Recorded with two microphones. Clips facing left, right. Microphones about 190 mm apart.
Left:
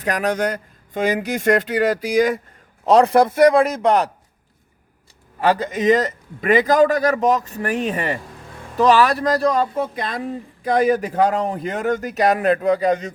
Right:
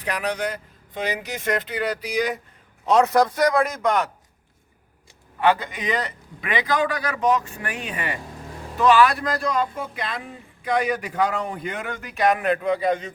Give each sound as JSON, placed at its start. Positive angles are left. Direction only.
{"t": 0.0, "sound": "speech", "side_deg": 45}
{"t": 2.8, "sound": "speech", "side_deg": 35}
{"t": 5.4, "sound": "speech", "side_deg": 40}